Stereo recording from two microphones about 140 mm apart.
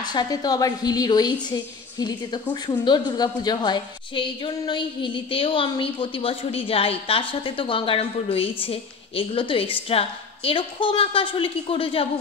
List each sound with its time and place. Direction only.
0.0 s a woman's voice: 30° left (ahead or behind)